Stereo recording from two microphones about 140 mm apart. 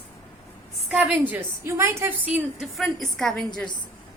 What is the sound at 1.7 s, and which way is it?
Speech, 20° right (ahead or behind).